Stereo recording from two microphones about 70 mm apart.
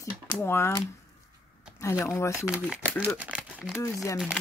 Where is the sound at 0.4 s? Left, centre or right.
Left.